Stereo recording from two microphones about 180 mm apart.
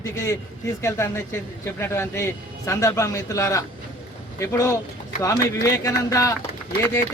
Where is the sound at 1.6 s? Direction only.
15° left (ahead or behind).